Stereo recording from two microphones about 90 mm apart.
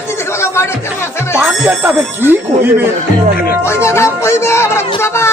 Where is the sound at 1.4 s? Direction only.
20° right (ahead or behind).